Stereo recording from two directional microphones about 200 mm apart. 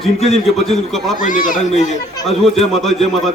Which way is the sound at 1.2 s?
40° left (ahead or behind).